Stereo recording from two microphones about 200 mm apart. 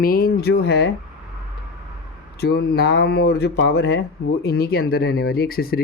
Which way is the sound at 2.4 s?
55° left (ahead or behind).